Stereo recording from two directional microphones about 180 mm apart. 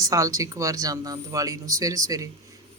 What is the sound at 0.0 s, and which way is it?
Speech, 20° right (ahead or behind).